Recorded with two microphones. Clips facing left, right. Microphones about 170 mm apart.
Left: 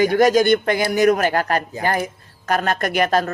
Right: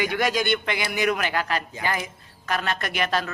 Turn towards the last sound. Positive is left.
turn(degrees=45)  # may be behind; listen again after turning